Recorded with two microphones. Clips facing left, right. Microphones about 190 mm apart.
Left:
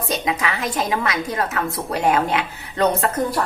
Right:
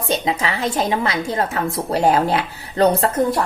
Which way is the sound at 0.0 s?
30° right (ahead or behind).